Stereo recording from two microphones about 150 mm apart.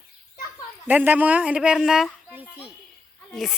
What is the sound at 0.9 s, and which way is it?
Speech, 10° right (ahead or behind).